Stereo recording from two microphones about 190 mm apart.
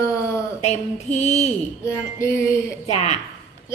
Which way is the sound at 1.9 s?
15° left (ahead or behind).